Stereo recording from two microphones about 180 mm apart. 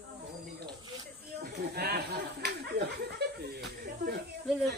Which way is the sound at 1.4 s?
60° right (ahead or behind).